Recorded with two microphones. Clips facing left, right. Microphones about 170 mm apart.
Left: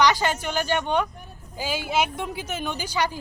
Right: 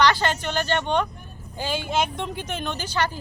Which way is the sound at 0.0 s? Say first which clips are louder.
Even; 10° left (ahead or behind).